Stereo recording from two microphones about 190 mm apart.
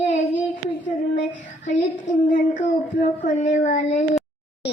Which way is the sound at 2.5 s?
40° left (ahead or behind).